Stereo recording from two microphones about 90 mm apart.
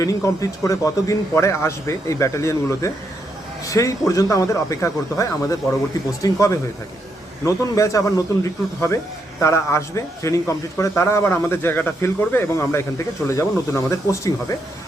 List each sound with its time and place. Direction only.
0.0 s a man's voice: 40° left (ahead or behind)
9.4 s a man's voice: 30° left (ahead or behind)